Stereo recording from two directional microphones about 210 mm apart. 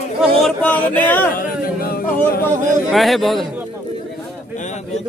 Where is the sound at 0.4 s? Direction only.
5° left (ahead or behind).